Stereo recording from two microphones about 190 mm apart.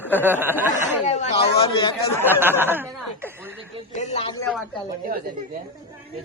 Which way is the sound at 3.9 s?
35° left (ahead or behind).